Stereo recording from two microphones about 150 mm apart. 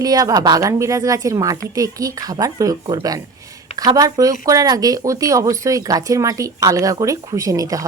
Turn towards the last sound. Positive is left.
turn(degrees=-20)  # may be behind; listen again after turning